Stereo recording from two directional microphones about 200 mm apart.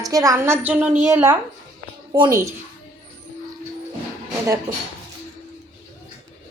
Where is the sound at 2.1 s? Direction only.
20° right (ahead or behind).